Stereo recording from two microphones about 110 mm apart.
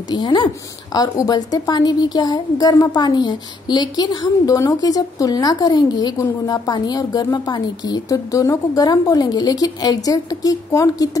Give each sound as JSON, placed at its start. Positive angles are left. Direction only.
{"t": 0.1, "sound": "a woman's voice", "side_deg": 40}